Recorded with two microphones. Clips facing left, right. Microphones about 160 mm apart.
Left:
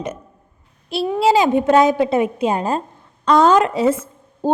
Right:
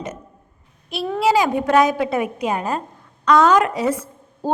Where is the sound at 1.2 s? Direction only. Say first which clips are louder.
Left 3 dB; 25° left (ahead or behind).